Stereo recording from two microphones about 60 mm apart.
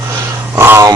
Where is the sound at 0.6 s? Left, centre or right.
Right.